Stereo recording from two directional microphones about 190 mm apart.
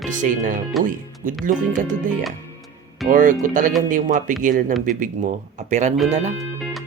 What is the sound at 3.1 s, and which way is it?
Speech, 45° right (ahead or behind).